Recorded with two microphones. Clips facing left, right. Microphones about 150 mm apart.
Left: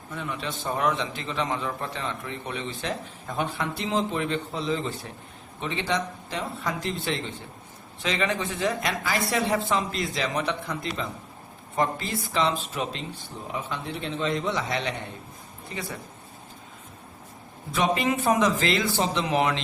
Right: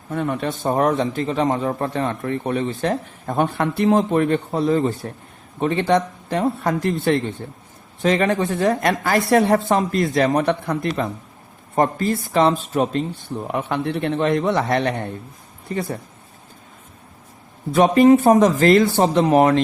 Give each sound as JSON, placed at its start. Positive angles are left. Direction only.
{"t": 0.1, "sound": "a man's voice", "side_deg": -50}
{"t": 13.5, "sound": "a man's voice", "side_deg": -65}
{"t": 17.7, "sound": "a man's voice", "side_deg": -45}